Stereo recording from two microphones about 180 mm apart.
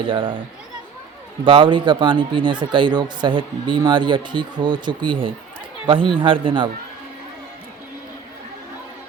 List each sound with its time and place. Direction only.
0.0 s speech: 25° right (ahead or behind)
1.5 s speech: 30° right (ahead or behind)